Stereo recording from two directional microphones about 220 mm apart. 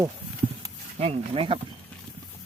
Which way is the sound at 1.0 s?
25° right (ahead or behind).